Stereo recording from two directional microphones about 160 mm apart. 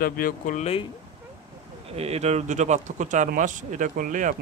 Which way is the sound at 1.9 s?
40° right (ahead or behind).